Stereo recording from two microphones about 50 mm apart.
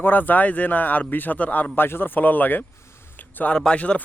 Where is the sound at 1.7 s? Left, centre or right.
Left.